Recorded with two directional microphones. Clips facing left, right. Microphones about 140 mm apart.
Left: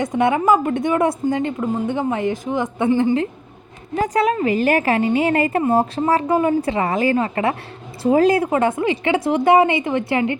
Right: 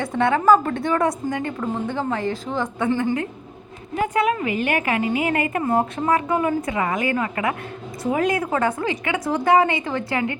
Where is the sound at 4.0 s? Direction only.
35° left (ahead or behind).